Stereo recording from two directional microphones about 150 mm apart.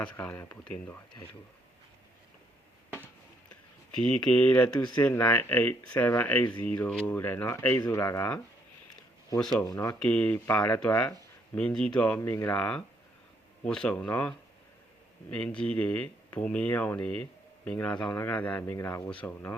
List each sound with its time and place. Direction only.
0.0 s speech: 10° left (ahead or behind)
4.3 s speech: 10° left (ahead or behind)
9.6 s speech: 20° left (ahead or behind)
9.9 s speech: 10° left (ahead or behind)
12.5 s speech: 5° left (ahead or behind)